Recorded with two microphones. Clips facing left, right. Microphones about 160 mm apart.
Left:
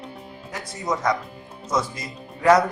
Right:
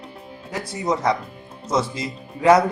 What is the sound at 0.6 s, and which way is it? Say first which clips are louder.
Speech: right 2 dB; 30° right (ahead or behind).